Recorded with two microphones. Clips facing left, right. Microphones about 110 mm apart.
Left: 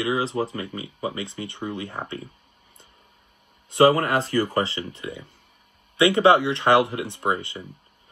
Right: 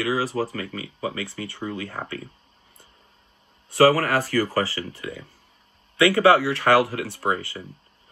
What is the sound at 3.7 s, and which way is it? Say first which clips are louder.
Speech: even; 20° left (ahead or behind).